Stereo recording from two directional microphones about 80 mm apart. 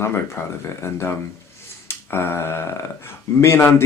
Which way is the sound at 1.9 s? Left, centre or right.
Left.